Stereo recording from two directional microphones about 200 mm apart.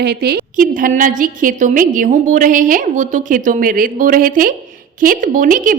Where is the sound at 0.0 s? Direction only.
55° right (ahead or behind).